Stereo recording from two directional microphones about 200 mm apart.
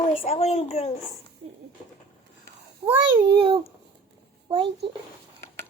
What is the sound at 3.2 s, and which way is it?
A child's voice, 25° right (ahead or behind).